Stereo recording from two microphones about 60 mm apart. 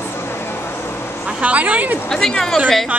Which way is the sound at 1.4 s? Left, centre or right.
Right.